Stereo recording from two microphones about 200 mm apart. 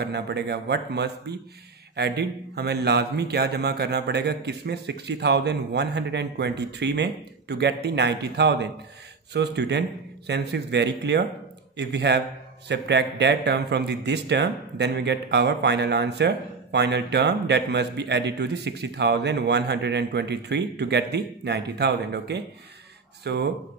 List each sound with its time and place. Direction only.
0.0 s a man's voice: 55° right (ahead or behind)